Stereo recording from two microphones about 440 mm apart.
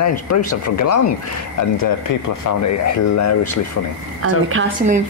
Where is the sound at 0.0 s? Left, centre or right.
Left.